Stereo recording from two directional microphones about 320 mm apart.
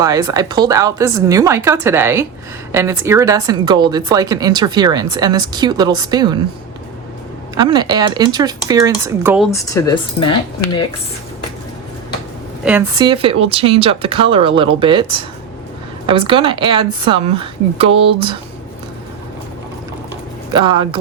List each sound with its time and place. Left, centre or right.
0.0 s speech: centre
7.5 s speech: centre
9.5 s speech: centre
12.6 s speech: centre
16.0 s speech: centre
20.5 s speech: centre